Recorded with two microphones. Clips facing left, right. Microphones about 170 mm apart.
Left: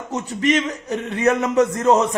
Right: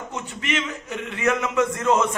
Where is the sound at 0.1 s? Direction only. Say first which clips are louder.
Left 10 dB; 40° left (ahead or behind).